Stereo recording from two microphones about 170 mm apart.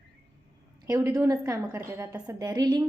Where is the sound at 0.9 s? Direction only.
20° right (ahead or behind).